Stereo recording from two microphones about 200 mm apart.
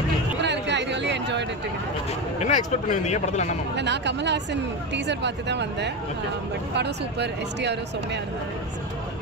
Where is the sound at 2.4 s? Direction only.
35° left (ahead or behind).